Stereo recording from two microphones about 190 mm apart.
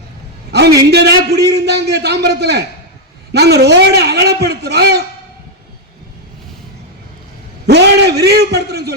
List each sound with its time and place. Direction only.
0.5 s a sound: 60° right (ahead or behind)
0.9 s a man's voice: 60° right (ahead or behind)
7.7 s a man's voice: 60° right (ahead or behind)